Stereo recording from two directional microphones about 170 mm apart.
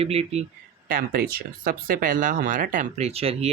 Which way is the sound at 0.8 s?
60° right (ahead or behind).